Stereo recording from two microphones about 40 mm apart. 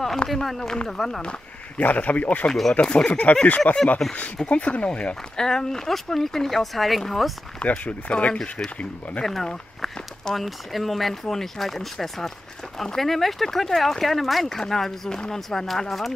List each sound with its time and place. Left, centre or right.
0.3 s speech: centre
1.8 s speech: left
4.0 s speech: centre
4.5 s speech: left
5.4 s speech: centre
7.6 s speech: left
9.2 s speech: centre
10.3 s speech: centre
14.6 s speech: centre